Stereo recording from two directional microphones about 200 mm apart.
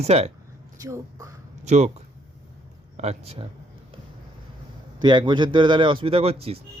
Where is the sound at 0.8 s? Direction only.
15° right (ahead or behind).